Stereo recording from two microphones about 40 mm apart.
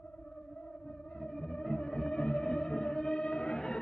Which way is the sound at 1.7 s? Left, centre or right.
Left.